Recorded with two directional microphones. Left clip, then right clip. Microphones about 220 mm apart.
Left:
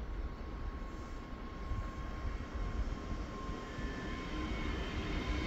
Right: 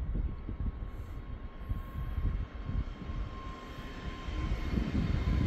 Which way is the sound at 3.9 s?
55° right (ahead or behind).